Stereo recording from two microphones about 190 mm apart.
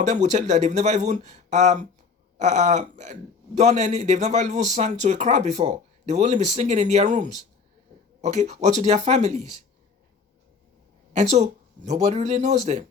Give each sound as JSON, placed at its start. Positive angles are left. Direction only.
{"t": 0.0, "sound": "a man's voice", "side_deg": -40}
{"t": 11.1, "sound": "a man's voice", "side_deg": -40}